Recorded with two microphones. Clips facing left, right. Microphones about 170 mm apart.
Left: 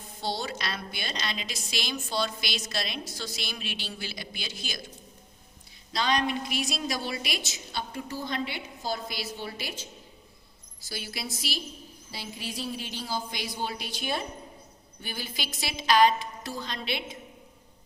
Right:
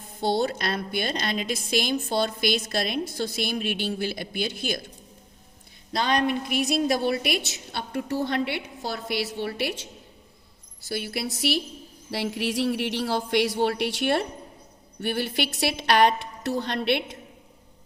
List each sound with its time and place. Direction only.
0.2 s a woman's voice: 55° right (ahead or behind)
5.9 s a woman's voice: 55° right (ahead or behind)